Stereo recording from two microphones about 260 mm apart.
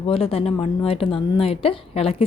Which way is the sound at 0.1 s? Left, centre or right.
Left.